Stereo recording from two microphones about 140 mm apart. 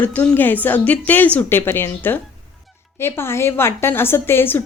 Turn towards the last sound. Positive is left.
turn(degrees=15)  # may be behind; listen again after turning